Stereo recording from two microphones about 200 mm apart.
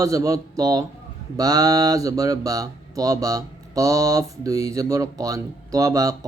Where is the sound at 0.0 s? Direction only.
15° right (ahead or behind).